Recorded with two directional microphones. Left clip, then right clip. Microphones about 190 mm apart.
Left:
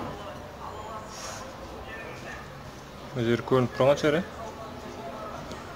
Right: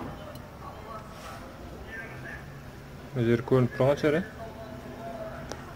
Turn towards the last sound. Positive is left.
turn(degrees=-10)  # may be behind; listen again after turning